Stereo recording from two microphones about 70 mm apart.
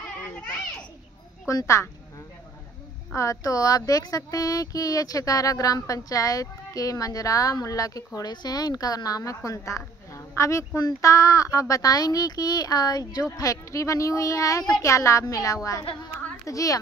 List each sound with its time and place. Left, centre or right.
1.5 s speech: left
3.2 s speech: left